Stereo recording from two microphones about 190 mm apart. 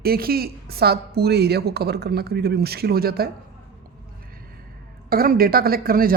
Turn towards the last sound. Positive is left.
turn(degrees=-50)  # may be behind; listen again after turning